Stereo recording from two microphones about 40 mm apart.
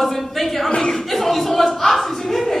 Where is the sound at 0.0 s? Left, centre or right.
Centre.